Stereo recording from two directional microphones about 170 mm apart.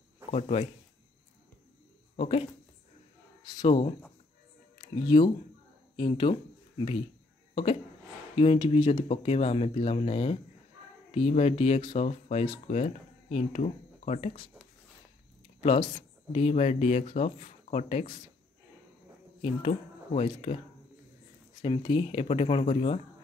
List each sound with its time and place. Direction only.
0.3 s speech: 40° left (ahead or behind)
2.1 s speech: 35° left (ahead or behind)
3.6 s speech: 35° left (ahead or behind)
4.7 s music: 25° left (ahead or behind)
5.9 s speech: 30° left (ahead or behind)
8.4 s speech: 30° left (ahead or behind)
15.6 s speech: 35° left (ahead or behind)
19.4 s speech: 35° left (ahead or behind)
21.5 s speech: 30° left (ahead or behind)